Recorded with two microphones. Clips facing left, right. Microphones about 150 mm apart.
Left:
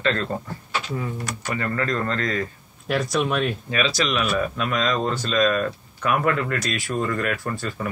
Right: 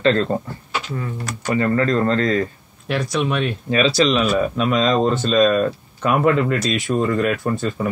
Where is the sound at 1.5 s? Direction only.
30° right (ahead or behind).